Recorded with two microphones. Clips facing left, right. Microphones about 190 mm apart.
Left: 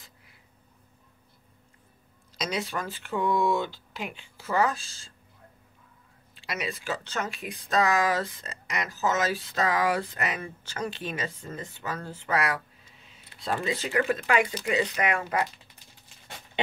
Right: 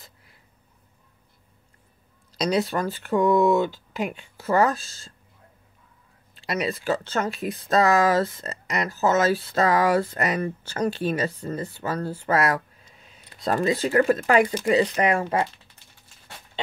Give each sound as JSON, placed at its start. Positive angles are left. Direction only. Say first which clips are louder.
{"t": 2.3, "sound": "speech", "louder": "right 8 dB", "side_deg": -35}
{"t": 3.1, "sound": "speech", "louder": "right 7 dB", "side_deg": -45}
{"t": 6.3, "sound": "speech", "louder": "right 7 dB", "side_deg": -35}